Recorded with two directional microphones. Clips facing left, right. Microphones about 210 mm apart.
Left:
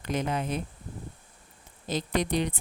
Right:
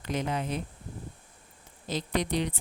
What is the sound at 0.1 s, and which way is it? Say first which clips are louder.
Speech: left 1 dB; 50° left (ahead or behind).